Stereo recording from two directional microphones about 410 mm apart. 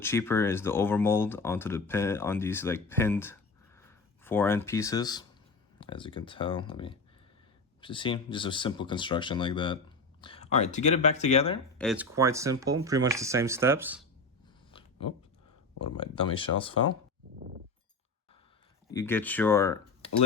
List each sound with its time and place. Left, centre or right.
0.0 s speech: centre
11.8 s speech: centre
14.7 s a sound: centre
16.0 s speech: centre
18.9 s speech: centre